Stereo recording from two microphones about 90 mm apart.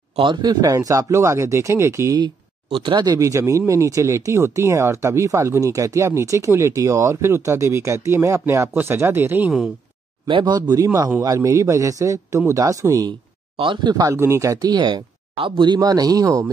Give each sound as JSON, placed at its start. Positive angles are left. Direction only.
{"t": 0.2, "sound": "speech", "side_deg": -55}
{"t": 2.7, "sound": "speech", "side_deg": -60}
{"t": 3.2, "sound": "speech", "side_deg": -35}
{"t": 10.2, "sound": "speech", "side_deg": -60}
{"t": 14.1, "sound": "speech", "side_deg": -30}
{"t": 14.7, "sound": "speech", "side_deg": -55}